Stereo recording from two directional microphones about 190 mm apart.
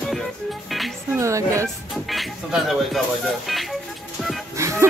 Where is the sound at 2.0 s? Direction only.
Centre (ahead or behind).